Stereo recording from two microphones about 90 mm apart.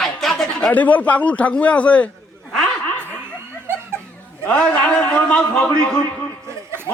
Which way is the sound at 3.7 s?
25° right (ahead or behind).